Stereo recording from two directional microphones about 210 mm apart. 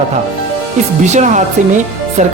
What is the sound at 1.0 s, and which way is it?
Speech, 35° right (ahead or behind).